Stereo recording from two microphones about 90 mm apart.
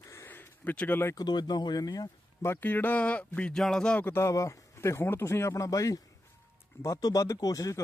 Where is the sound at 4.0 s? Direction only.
30° left (ahead or behind).